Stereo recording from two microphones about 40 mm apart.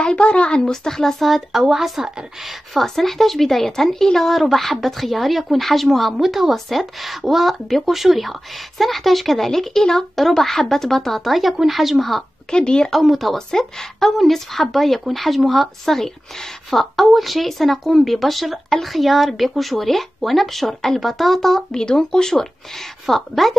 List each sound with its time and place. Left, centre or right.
0.1 s a woman's voice: left
0.6 s speech: centre
1.2 s a woman's voice: centre
2.7 s a woman's voice: centre
6.1 s a woman's voice: centre
12.4 s a woman's voice: left
12.9 s a woman's voice: centre
13.5 s a woman's voice: centre
21.7 s a woman's voice: centre